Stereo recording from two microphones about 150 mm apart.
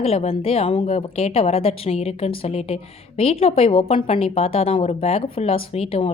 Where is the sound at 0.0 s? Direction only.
40° left (ahead or behind).